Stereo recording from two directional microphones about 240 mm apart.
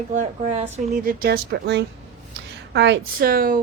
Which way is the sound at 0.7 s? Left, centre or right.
Right.